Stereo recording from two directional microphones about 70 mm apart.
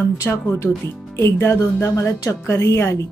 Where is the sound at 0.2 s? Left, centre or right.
Left.